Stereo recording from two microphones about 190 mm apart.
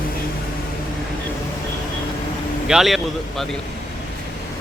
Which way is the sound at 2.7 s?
Centre (ahead or behind).